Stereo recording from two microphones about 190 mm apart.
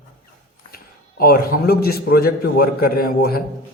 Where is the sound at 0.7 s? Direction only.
50° left (ahead or behind).